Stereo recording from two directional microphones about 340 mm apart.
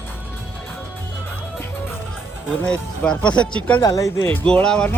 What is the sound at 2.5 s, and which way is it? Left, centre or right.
Speech, centre.